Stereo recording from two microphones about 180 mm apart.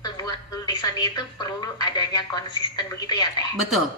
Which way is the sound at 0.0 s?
20° left (ahead or behind).